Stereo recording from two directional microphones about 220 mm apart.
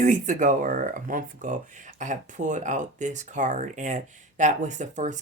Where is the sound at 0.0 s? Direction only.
35° right (ahead or behind).